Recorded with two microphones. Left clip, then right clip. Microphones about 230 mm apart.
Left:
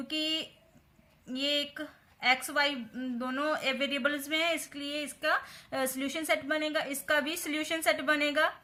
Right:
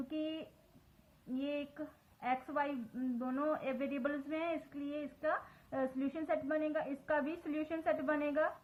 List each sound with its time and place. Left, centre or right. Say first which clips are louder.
0.1 s speech: left 13 dB; left